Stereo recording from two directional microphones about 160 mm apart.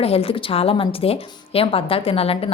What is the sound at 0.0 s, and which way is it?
A woman's voice, 35° left (ahead or behind).